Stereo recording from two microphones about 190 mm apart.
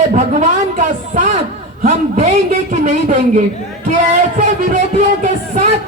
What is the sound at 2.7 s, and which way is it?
Speech, 40° right (ahead or behind).